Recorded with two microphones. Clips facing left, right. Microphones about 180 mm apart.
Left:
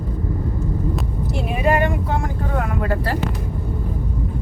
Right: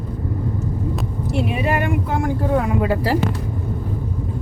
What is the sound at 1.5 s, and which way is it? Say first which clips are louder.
Speech: left 5 dB; 45° left (ahead or behind).